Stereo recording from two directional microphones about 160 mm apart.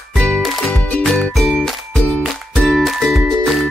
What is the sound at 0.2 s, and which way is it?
Music, 5° left (ahead or behind).